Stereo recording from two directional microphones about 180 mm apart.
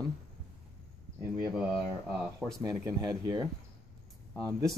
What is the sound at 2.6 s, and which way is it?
Speech, 20° right (ahead or behind).